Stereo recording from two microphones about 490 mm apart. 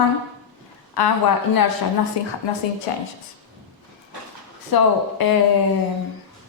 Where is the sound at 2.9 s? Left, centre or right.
Left.